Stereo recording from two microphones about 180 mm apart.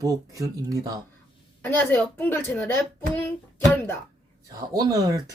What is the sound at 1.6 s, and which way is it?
A woman's voice, 10° left (ahead or behind).